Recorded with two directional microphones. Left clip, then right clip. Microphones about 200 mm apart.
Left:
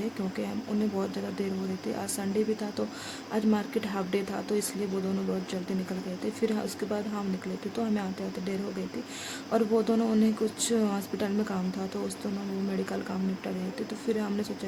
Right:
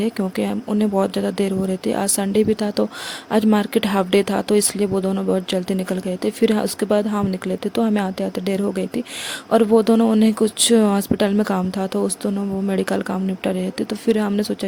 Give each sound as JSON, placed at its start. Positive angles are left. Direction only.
{"t": 0.9, "sound": "speech", "side_deg": -50}
{"t": 9.5, "sound": "speech", "side_deg": -45}